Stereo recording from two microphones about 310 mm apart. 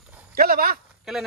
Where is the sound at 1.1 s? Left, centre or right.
Centre.